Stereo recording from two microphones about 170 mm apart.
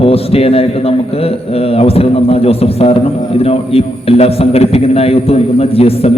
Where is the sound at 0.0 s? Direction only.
35° left (ahead or behind).